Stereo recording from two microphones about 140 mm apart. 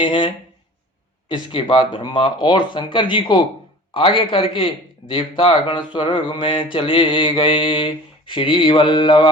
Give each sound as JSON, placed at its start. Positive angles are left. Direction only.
{"t": 0.0, "sound": "mantra", "side_deg": 35}